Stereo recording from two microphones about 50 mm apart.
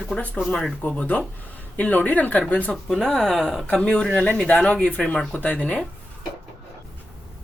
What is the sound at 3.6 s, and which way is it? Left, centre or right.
Speech, left.